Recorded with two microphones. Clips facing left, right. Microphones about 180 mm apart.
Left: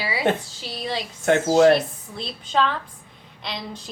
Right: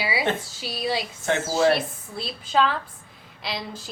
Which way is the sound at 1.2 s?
60° left (ahead or behind).